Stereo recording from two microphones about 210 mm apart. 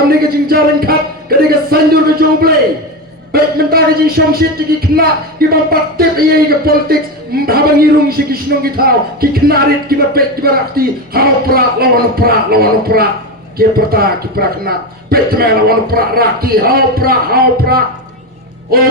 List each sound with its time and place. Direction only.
0.1 s a man's voice: 45° right (ahead or behind)